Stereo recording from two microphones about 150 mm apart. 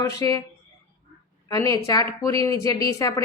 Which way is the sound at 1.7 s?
25° left (ahead or behind).